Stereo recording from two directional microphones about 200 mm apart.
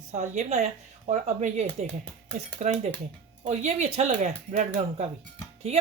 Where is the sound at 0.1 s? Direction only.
35° right (ahead or behind).